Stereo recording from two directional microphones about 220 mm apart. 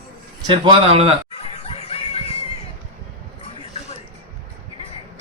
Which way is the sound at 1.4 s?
25° left (ahead or behind).